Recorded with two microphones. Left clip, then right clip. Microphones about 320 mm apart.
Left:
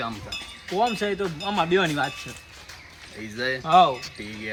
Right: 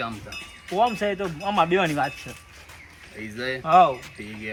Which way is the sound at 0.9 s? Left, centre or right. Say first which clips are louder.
Right 1 dB; centre.